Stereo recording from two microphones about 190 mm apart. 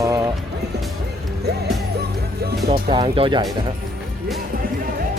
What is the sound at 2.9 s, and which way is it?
Speech, 25° right (ahead or behind).